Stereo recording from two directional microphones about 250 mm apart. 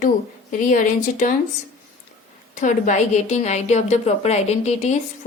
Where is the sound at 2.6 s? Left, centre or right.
Left.